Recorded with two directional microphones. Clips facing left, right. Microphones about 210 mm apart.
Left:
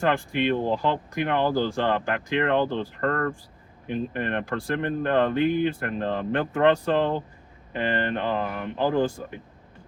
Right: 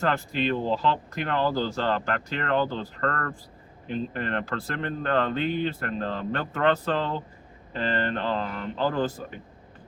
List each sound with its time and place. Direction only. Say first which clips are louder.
0.0 s speech: left 2 dB; 15° left (ahead or behind)